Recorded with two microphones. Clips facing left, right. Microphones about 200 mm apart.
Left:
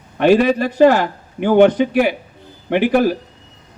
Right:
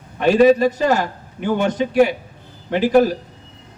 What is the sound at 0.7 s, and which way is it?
A man's voice, 60° left (ahead or behind).